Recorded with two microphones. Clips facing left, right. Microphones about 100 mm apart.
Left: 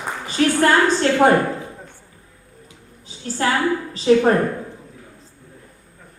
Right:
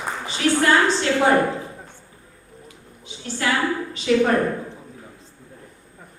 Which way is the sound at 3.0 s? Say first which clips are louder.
Left 4 dB; 35° left (ahead or behind).